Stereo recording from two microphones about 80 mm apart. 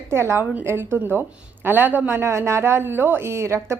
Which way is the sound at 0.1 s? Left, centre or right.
Right.